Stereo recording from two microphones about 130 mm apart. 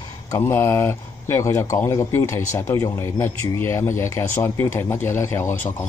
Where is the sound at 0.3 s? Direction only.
20° left (ahead or behind).